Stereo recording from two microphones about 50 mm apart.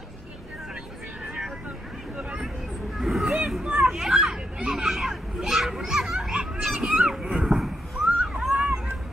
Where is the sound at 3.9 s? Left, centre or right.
Centre.